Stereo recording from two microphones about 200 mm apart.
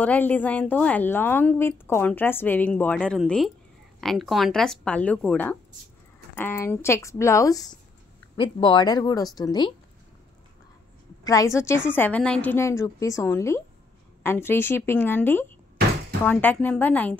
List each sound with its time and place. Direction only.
0.0 s a woman's voice: 10° left (ahead or behind)
11.2 s a woman's voice: 15° left (ahead or behind)